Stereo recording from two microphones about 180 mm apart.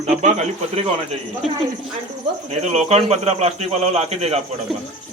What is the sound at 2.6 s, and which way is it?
A man's voice, 40° right (ahead or behind).